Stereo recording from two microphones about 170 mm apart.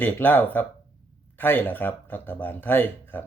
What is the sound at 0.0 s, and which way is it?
Speech, 10° left (ahead or behind).